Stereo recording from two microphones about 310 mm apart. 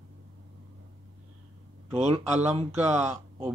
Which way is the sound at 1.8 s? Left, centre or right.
Right.